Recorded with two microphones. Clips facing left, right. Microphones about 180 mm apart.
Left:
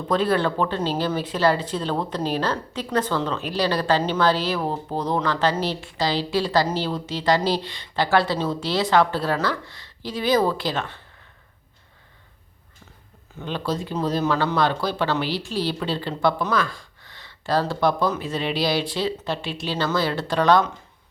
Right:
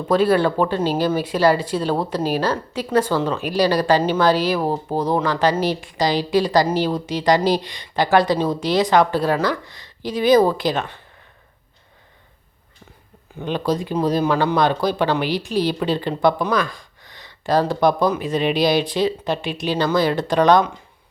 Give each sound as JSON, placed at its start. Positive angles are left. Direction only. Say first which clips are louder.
{"t": 0.1, "sound": "speech", "louder": "right 5 dB", "side_deg": -10}
{"t": 13.4, "sound": "speech", "louder": "right 5 dB", "side_deg": -15}